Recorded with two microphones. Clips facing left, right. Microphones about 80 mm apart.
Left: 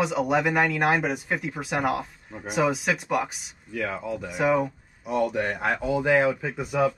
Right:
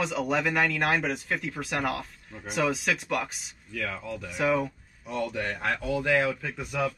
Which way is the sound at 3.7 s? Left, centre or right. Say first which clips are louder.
Left 5 dB; centre.